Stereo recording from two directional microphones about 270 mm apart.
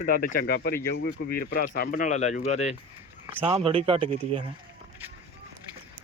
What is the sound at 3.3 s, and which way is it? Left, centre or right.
Speech, centre.